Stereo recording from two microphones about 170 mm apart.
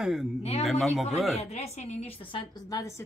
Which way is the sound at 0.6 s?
Centre (ahead or behind).